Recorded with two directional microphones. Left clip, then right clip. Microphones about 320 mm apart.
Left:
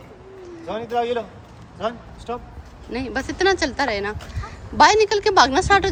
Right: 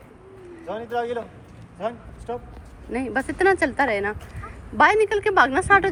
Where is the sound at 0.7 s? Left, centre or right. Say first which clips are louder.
Left 4 dB; left.